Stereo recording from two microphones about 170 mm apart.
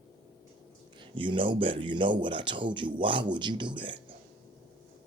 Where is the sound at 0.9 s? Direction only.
30° right (ahead or behind).